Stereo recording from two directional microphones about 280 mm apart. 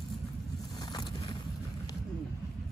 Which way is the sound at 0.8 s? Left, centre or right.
Centre.